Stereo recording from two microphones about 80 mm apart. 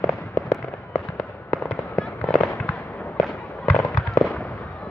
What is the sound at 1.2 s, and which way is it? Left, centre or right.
Fireworks, left.